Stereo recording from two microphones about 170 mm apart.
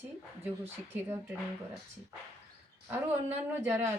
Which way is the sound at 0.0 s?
15° right (ahead or behind).